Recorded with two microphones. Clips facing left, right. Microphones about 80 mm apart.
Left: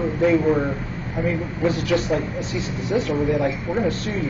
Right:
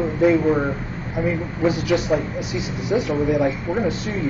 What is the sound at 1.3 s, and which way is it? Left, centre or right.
Speech, centre.